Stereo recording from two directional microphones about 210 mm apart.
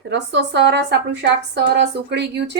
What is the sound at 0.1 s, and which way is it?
A woman's voice, 55° right (ahead or behind).